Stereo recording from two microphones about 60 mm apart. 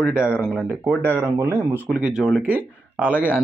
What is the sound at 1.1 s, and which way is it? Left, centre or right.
Speech, right.